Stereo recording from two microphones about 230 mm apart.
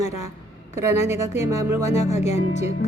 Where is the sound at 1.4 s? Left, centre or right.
Centre.